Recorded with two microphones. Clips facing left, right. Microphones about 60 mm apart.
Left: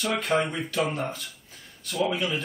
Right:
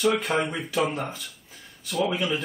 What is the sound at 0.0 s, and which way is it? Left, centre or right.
A man's voice, centre.